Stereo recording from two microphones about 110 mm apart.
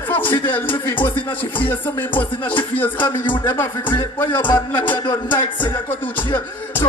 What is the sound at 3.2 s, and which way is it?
Speech, 25° left (ahead or behind).